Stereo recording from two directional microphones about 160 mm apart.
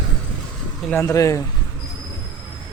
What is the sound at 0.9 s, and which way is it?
Speech, 15° left (ahead or behind).